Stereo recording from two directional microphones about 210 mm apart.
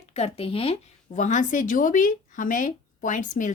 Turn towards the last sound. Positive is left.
turn(degrees=35)  # may be behind; listen again after turning